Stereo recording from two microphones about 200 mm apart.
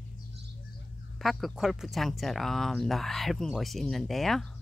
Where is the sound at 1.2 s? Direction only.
Centre (ahead or behind).